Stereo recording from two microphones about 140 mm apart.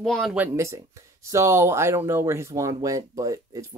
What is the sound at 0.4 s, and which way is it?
Speech, 20° right (ahead or behind).